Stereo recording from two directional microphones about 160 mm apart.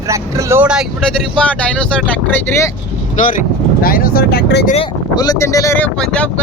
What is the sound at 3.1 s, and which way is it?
Speech, 55° left (ahead or behind).